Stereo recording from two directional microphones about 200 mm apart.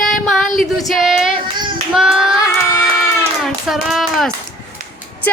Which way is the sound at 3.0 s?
Centre (ahead or behind).